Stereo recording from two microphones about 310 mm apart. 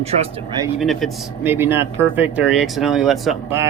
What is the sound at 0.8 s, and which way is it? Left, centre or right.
Speech, centre.